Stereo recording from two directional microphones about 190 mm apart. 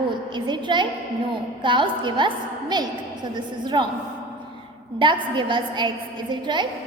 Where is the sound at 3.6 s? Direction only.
25° right (ahead or behind).